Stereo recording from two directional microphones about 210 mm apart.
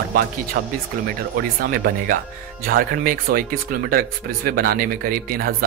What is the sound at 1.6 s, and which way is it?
Speech, 45° right (ahead or behind).